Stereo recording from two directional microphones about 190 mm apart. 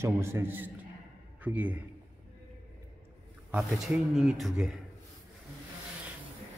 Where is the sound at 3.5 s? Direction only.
Centre (ahead or behind).